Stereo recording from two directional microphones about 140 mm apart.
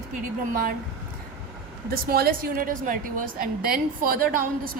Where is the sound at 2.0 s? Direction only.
90° right.